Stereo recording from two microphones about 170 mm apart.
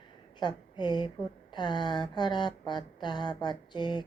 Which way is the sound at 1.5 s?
25° left (ahead or behind).